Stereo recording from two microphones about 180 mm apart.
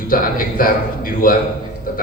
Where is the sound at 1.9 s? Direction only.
50° left (ahead or behind).